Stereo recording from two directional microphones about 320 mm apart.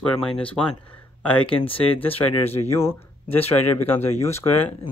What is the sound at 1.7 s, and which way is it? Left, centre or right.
Speech, centre.